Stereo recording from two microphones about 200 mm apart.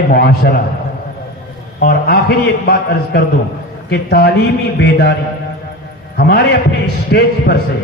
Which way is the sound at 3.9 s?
55° left (ahead or behind).